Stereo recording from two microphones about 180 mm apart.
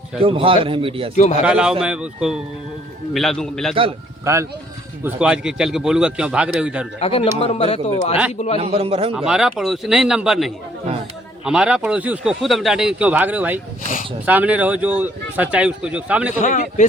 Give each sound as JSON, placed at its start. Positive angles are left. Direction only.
{"t": 0.2, "sound": "a man's voice", "side_deg": -30}
{"t": 1.5, "sound": "a man's voice", "side_deg": -5}
{"t": 4.3, "sound": "a man's voice", "side_deg": -15}
{"t": 5.0, "sound": "a man's voice", "side_deg": -5}
{"t": 7.0, "sound": "a man's voice", "side_deg": 30}
{"t": 8.6, "sound": "a man's voice", "side_deg": -35}
{"t": 9.1, "sound": "a man's voice", "side_deg": -5}
{"t": 16.4, "sound": "a man's voice", "side_deg": 45}